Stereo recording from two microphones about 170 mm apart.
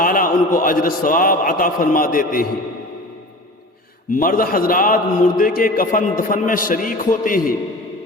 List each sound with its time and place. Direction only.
0.0 s a man's voice: 55° left (ahead or behind)
4.1 s a man's voice: 55° left (ahead or behind)